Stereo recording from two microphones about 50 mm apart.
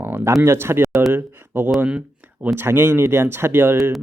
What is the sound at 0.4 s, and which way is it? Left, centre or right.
Speech, right.